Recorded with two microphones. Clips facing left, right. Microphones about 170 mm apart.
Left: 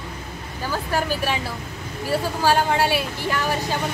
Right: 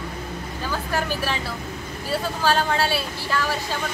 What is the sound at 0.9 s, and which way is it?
A woman's voice, 15° left (ahead or behind).